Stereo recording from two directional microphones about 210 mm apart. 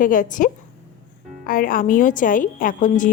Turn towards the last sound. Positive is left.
turn(degrees=40)  # may be behind; listen again after turning